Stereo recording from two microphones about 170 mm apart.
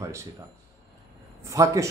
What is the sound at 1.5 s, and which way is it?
Speech, 20° right (ahead or behind).